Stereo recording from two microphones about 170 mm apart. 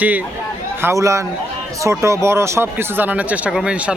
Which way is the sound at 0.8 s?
15° right (ahead or behind).